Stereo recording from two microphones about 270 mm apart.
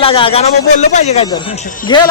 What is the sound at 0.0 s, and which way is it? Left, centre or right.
A man's voice, centre.